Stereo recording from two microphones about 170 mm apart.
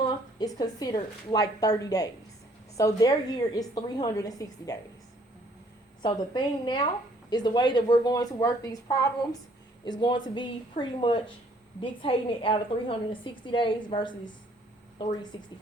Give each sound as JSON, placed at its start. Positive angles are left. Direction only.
{"t": 0.3, "sound": "a woman's voice", "side_deg": 20}
{"t": 6.0, "sound": "a woman's voice", "side_deg": 25}